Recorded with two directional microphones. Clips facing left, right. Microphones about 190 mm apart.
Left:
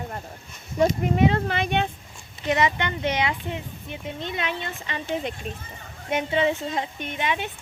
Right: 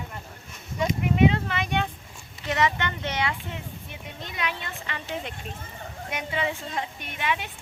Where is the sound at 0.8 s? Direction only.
40° left (ahead or behind).